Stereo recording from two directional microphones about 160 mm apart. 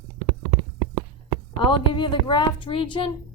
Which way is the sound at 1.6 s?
30° left (ahead or behind).